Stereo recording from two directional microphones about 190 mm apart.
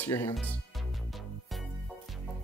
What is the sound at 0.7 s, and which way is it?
Music, centre (ahead or behind).